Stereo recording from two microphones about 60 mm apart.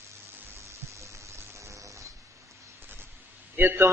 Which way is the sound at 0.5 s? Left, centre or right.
Right.